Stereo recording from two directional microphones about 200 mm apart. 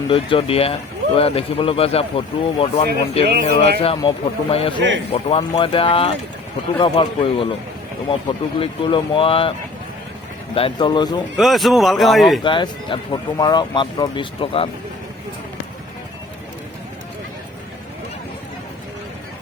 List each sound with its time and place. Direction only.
0.1 s speech: 25° left (ahead or behind)
3.3 s speech: 55° right (ahead or behind)
3.8 s speech: 25° left (ahead or behind)
8.5 s speech: 25° left (ahead or behind)
10.5 s speech: 25° left (ahead or behind)
11.3 s a man's voice: centre (ahead or behind)
12.4 s speech: 25° left (ahead or behind)